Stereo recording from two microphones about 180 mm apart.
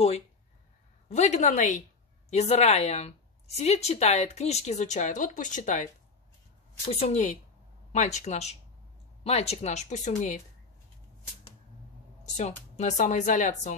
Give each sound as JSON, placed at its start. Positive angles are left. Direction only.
{"t": 1.0, "sound": "a woman's voice", "side_deg": 40}
{"t": 6.9, "sound": "a woman's voice", "side_deg": 35}
{"t": 12.4, "sound": "a woman's voice", "side_deg": 40}